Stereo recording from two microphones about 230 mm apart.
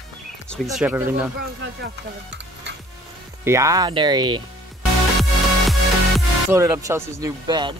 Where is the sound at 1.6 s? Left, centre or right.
Right.